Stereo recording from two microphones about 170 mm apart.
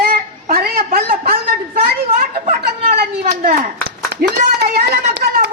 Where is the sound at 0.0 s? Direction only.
60° right (ahead or behind).